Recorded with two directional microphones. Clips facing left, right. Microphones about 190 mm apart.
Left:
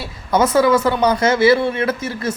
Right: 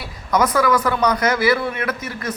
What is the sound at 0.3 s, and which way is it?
Speech, 25° left (ahead or behind).